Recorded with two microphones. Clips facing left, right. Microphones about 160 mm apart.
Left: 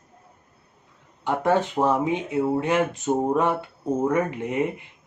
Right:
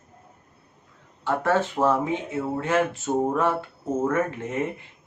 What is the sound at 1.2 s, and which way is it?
Speech, 15° left (ahead or behind).